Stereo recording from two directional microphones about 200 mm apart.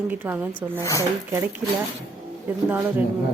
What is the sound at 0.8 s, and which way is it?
Speech, 15° left (ahead or behind).